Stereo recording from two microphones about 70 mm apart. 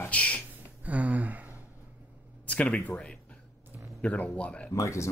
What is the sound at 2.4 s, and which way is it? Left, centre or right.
Speech, centre.